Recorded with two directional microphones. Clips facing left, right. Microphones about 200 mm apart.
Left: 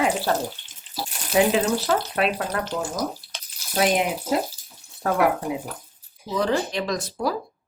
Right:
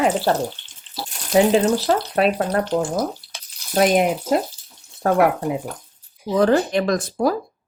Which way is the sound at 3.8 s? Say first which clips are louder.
Right 5 dB; 50° right (ahead or behind).